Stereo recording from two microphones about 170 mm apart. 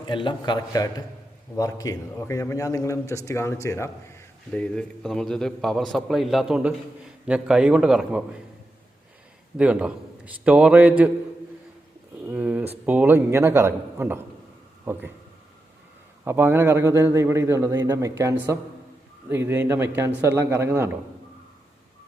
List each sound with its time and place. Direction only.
0.0 s a man's voice: 30° left (ahead or behind); by 8.2 s 5° right (ahead or behind)
9.6 s a man's voice: 5° right (ahead or behind)
12.2 s a sound: 10° right (ahead or behind)
12.8 s a man's voice: 10° right (ahead or behind)
16.2 s a man's voice: 15° right (ahead or behind)